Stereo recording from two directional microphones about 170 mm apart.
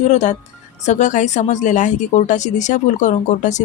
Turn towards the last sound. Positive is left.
turn(degrees=45)  # may be behind; listen again after turning